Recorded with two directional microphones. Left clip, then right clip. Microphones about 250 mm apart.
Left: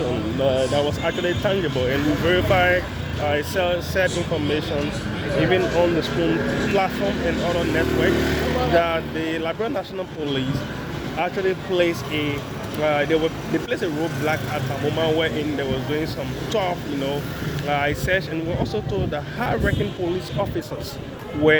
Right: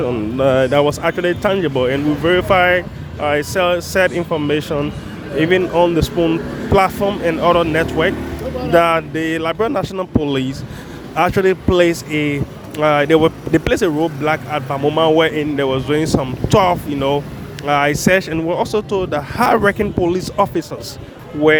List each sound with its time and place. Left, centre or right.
0.4 s speech: right
11.2 s speech: right